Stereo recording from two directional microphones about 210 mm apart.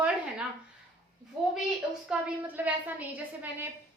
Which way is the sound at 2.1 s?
10° right (ahead or behind).